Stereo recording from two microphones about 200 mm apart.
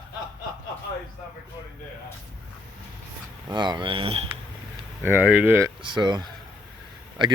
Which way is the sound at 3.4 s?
20° right (ahead or behind).